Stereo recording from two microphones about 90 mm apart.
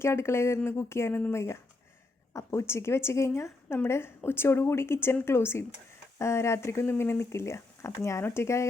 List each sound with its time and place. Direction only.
0.0 s speech: 30° left (ahead or behind)